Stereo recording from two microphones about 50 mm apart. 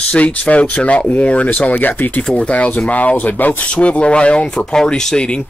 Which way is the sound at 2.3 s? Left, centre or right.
Left.